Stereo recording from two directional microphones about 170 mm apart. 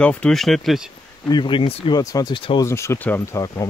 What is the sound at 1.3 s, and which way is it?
Speech, 30° left (ahead or behind).